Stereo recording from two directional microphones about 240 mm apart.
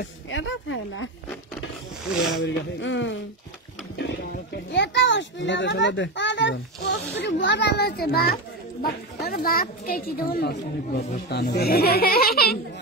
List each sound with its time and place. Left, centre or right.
0.0 s speech: left
2.4 s a child's voice: left
4.0 s a sound: left
4.7 s a child's voice: left